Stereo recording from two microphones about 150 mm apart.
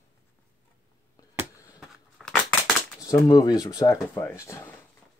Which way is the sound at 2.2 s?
Centre (ahead or behind).